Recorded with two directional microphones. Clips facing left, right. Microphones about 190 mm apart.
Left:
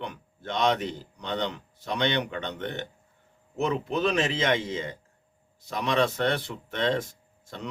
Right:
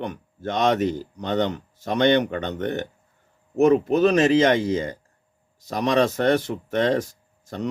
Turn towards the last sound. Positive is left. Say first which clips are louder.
# right 9 dB
turn(degrees=-40)  # may be behind; listen again after turning